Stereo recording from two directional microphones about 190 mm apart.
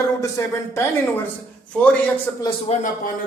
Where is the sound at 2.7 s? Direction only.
35° left (ahead or behind).